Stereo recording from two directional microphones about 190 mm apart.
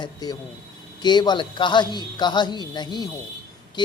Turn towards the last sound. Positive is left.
turn(degrees=20)  # may be behind; listen again after turning